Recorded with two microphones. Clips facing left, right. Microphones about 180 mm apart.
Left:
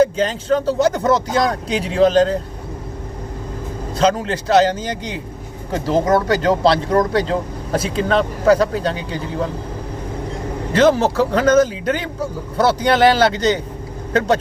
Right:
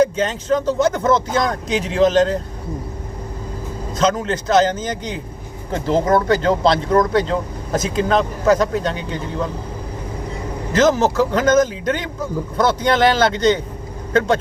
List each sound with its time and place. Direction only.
0.0 s speech: 35° left (ahead or behind)
3.9 s speech: 35° left (ahead or behind)
10.7 s speech: 35° left (ahead or behind)